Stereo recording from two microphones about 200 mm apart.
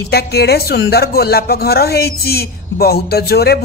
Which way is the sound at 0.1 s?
55° left (ahead or behind).